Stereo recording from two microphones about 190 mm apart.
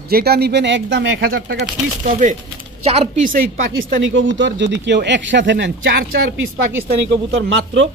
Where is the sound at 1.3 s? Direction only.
60° right (ahead or behind).